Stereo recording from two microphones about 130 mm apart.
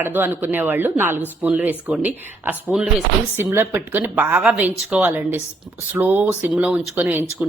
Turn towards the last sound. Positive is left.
turn(degrees=-10)  # may be behind; listen again after turning